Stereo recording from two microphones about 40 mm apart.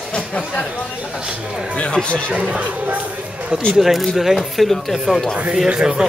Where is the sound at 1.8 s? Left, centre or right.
Left.